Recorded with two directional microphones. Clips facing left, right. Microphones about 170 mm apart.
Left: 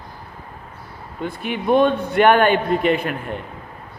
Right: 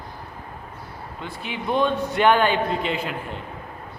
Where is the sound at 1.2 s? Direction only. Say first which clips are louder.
Left 7 dB; 55° left (ahead or behind).